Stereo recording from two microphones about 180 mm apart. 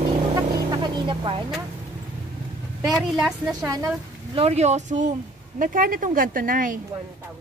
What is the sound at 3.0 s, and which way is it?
Speech, 5° right (ahead or behind).